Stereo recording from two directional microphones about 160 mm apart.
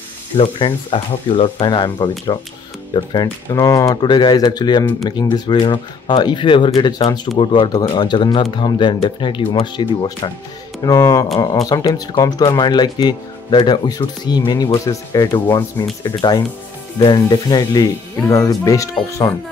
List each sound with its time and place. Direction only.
0.4 s speech: 30° left (ahead or behind)